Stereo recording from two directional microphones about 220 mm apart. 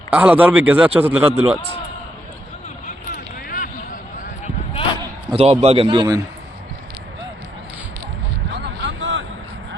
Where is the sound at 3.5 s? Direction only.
35° left (ahead or behind).